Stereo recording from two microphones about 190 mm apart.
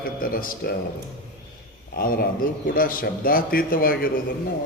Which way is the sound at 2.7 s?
50° left (ahead or behind).